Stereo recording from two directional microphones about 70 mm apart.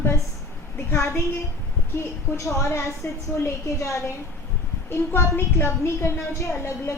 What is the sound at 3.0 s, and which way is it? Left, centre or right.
Speech, left.